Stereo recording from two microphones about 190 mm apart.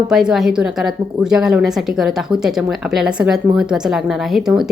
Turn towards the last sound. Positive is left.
turn(degrees=-5)  # may be behind; listen again after turning